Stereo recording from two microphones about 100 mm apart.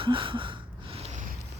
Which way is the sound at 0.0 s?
60° right (ahead or behind).